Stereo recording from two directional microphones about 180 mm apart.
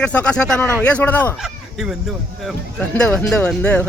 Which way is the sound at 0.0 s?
5° left (ahead or behind).